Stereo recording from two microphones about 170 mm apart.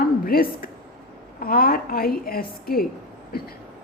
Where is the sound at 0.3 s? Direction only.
60° left (ahead or behind).